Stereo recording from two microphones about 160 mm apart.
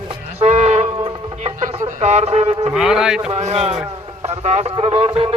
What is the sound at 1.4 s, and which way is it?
Speech, 40° right (ahead or behind).